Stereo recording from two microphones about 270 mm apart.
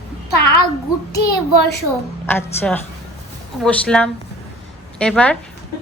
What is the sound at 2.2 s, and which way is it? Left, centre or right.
A woman's voice, centre.